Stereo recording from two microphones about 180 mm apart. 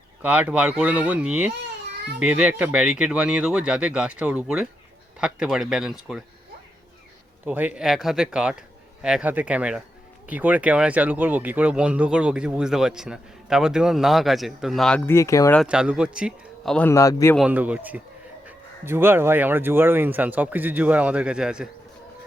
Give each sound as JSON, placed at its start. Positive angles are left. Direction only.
{"t": 0.2, "sound": "speech", "side_deg": -10}
{"t": 7.4, "sound": "speech", "side_deg": -10}
{"t": 15.6, "sound": "speech", "side_deg": -5}
{"t": 16.7, "sound": "a man's voice", "side_deg": 10}
{"t": 17.3, "sound": "speech", "side_deg": -5}